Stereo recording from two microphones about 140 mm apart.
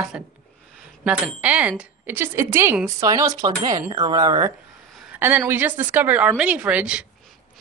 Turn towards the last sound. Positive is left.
turn(degrees=-10)  # may be behind; listen again after turning